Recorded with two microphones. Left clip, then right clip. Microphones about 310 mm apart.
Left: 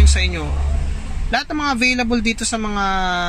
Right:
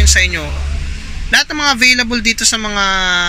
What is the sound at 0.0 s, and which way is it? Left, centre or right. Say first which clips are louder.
Speech: right 9 dB; centre.